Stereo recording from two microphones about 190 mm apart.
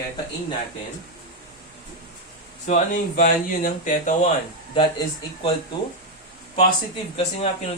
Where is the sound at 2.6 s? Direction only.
40° left (ahead or behind).